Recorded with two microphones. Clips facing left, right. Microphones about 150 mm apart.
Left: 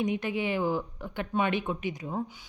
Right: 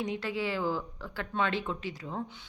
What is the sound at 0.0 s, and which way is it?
A woman's voice, 20° left (ahead or behind).